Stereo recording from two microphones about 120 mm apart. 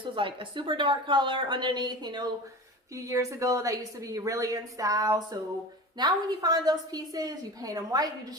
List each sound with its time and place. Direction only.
0.0 s a woman's voice: 45° right (ahead or behind)
2.9 s a woman's voice: 25° right (ahead or behind)